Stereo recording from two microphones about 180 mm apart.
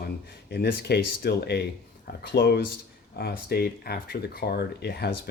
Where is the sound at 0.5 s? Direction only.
65° left (ahead or behind).